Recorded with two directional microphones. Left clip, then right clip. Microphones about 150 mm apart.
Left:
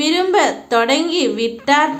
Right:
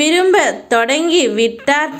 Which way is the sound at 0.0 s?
25° right (ahead or behind).